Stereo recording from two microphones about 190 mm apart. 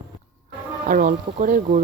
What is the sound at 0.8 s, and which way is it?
Speech, 45° right (ahead or behind).